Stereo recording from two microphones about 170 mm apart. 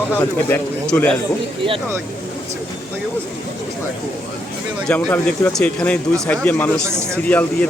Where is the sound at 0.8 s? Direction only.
5° left (ahead or behind).